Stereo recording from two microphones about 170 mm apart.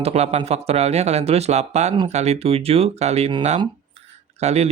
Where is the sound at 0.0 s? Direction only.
40° right (ahead or behind).